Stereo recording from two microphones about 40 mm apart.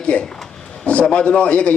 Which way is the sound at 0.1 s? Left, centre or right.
Left.